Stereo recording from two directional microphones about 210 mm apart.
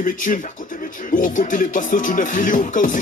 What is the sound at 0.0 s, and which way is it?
Speech, 40° left (ahead or behind).